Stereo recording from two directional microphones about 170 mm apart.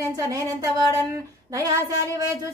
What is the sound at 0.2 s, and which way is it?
Speech, 20° right (ahead or behind).